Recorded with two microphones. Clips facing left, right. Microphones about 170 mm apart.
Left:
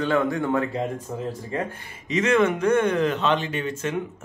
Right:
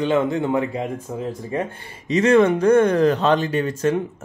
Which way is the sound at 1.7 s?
30° right (ahead or behind).